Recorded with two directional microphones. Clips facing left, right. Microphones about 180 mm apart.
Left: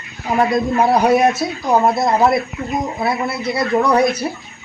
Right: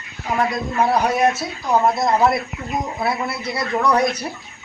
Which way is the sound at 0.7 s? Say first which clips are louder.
Left 4 dB; 10° left (ahead or behind).